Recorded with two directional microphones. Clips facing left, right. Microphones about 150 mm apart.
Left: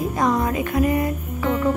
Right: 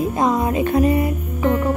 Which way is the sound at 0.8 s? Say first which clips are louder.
Even; 15° right (ahead or behind).